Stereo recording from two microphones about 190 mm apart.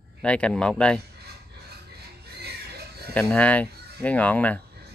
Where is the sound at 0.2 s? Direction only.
5° left (ahead or behind).